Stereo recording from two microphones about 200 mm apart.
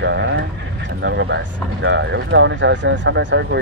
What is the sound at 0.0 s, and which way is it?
Speech, 60° right (ahead or behind).